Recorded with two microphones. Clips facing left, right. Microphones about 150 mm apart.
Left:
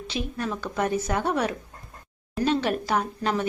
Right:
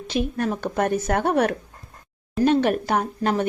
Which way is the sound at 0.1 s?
50° right (ahead or behind).